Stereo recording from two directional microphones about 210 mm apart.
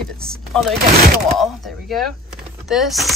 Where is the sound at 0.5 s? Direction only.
Centre (ahead or behind).